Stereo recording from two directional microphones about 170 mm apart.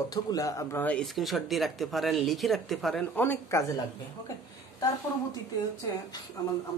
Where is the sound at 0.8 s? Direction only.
5° left (ahead or behind).